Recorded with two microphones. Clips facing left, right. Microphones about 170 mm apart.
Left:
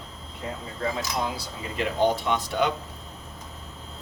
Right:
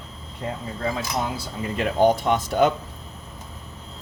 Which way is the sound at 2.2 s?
45° right (ahead or behind).